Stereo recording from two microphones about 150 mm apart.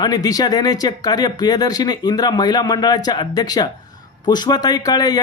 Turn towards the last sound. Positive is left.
turn(degrees=25)  # may be behind; listen again after turning